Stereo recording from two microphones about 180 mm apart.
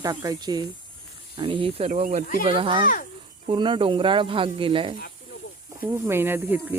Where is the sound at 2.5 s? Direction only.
30° right (ahead or behind).